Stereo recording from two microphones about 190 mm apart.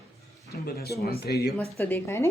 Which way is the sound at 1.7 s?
15° left (ahead or behind).